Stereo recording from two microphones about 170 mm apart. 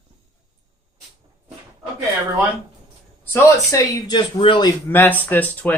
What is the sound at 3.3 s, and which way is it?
A man's voice, 20° left (ahead or behind).